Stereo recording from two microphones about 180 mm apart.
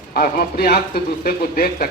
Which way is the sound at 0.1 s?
55° left (ahead or behind).